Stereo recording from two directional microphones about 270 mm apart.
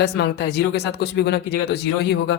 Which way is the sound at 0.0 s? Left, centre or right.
Left.